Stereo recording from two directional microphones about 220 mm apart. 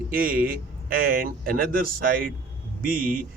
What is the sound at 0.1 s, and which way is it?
A man's voice, 40° right (ahead or behind).